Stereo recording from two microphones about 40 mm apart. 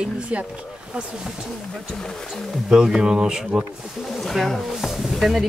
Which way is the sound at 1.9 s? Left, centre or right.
Centre.